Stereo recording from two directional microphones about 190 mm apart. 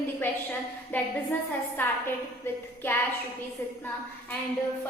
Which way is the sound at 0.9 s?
10° left (ahead or behind).